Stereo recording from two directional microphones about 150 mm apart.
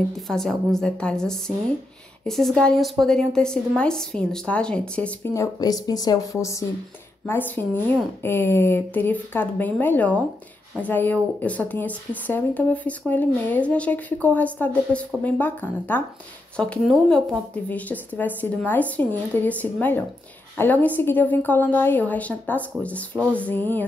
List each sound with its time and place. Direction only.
0.3 s a woman's voice: 5° left (ahead or behind)
5.3 s a woman's voice: 20° left (ahead or behind)